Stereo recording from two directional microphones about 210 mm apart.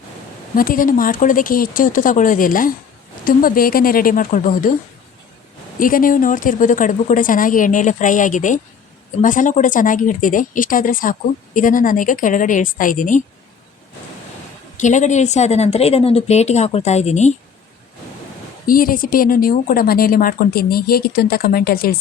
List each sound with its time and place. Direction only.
0.5 s a woman's voice: 40° left (ahead or behind)
5.8 s speech: 40° left (ahead or behind)
14.8 s speech: 35° left (ahead or behind)
18.6 s a woman's voice: 45° left (ahead or behind)